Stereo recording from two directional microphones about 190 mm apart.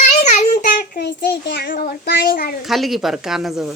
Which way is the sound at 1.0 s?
60° left (ahead or behind).